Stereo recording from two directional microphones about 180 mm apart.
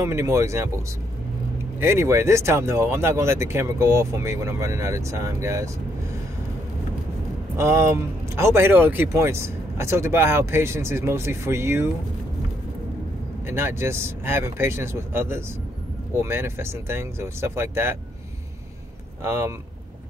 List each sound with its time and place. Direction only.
0.0 s speech: 15° right (ahead or behind)
1.8 s speech: 15° right (ahead or behind)
7.5 s speech: 15° right (ahead or behind)
13.5 s speech: 15° right (ahead or behind)
19.2 s speech: 15° right (ahead or behind)